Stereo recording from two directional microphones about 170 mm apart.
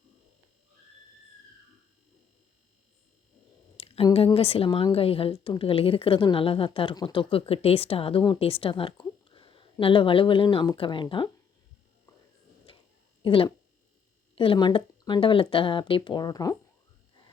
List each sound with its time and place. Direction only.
3.8 s a sound: 35° left (ahead or behind)
4.3 s a woman's voice: 35° left (ahead or behind)
13.2 s a woman's voice: 30° left (ahead or behind)